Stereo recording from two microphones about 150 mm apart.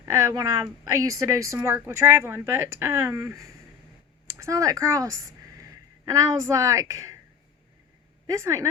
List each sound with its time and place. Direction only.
0.0 s a woman's voice: 20° right (ahead or behind)
8.3 s a woman's voice: 20° right (ahead or behind)